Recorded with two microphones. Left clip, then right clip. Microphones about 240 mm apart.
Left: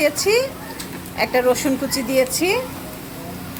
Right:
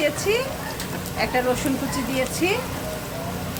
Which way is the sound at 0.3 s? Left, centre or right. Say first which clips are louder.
Left 5 dB; left.